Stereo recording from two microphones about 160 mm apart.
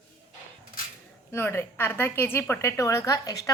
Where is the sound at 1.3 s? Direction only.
15° left (ahead or behind).